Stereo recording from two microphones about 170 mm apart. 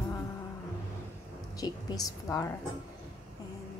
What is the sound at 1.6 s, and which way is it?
Speech, 20° left (ahead or behind).